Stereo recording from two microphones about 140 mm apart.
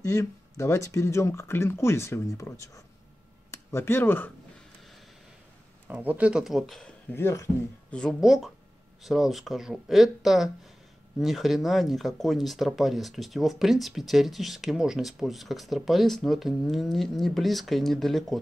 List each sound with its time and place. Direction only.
0.0 s speech: 20° left (ahead or behind)
5.9 s speech: 10° right (ahead or behind)
7.1 s speech: 20° left (ahead or behind)
7.9 s speech: 5° left (ahead or behind)